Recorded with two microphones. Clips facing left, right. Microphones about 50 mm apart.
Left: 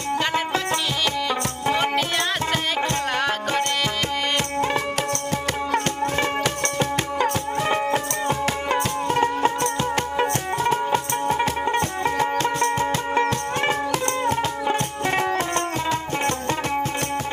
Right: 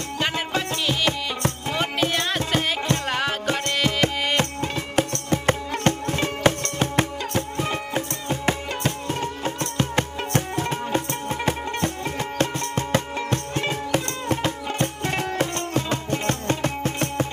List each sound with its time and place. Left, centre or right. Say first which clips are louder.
3.1 s music: left 2 dB; centre
3.8 s music: right 2 dB; right
9.0 s music: left 7 dB; left
10.6 s music: left 4 dB; left
15.0 s music: left 4 dB; left